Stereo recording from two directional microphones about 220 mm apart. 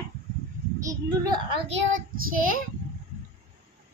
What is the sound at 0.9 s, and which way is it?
Speech, 20° right (ahead or behind).